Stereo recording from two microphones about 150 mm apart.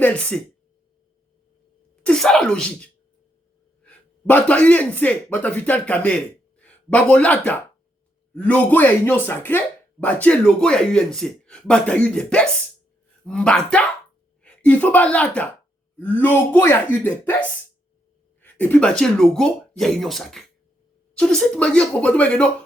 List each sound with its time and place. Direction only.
0.0 s speech: 10° left (ahead or behind)
2.0 s speech: 5° left (ahead or behind)